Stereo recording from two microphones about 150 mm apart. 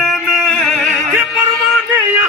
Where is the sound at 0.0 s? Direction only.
Centre (ahead or behind).